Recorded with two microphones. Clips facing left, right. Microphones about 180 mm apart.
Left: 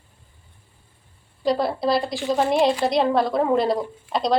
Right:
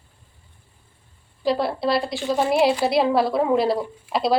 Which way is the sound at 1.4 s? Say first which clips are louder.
Even; centre (ahead or behind).